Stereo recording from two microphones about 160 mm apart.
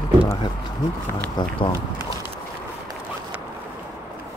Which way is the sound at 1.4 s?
30° left (ahead or behind).